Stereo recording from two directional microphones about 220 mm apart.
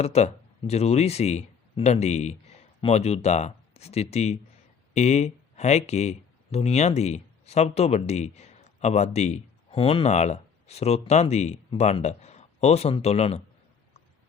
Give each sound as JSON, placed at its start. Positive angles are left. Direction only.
{"t": 0.0, "sound": "speech", "side_deg": 30}